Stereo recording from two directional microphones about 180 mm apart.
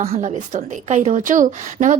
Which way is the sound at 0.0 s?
35° right (ahead or behind).